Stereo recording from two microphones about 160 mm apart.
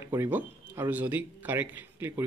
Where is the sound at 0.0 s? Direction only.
15° right (ahead or behind).